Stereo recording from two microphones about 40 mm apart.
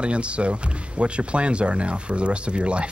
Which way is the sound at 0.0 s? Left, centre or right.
Right.